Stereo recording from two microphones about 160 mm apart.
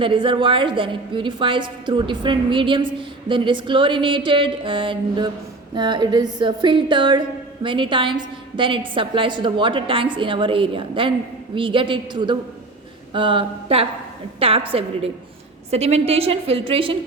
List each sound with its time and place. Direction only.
0.0 s a woman's voice: 30° right (ahead or behind)